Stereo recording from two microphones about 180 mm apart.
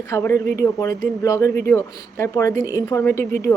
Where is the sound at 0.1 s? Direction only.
15° left (ahead or behind).